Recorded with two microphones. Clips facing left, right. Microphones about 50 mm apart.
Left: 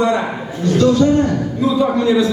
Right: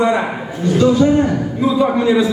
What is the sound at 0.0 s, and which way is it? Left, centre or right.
A man's voice, centre.